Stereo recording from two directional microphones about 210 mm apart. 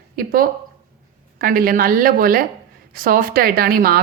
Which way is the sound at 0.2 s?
45° right (ahead or behind).